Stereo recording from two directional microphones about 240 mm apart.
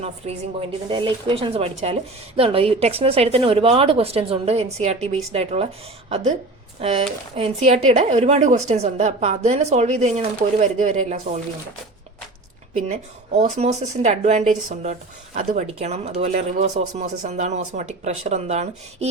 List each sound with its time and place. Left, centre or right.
0.2 s a woman's voice: right
12.9 s speech: right